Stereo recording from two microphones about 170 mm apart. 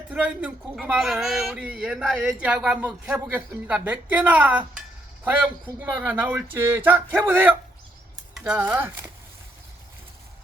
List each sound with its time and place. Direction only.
0.1 s a man's voice: 5° right (ahead or behind)